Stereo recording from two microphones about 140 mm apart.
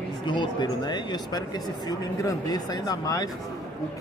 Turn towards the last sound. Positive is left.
turn(degrees=25)  # may be behind; listen again after turning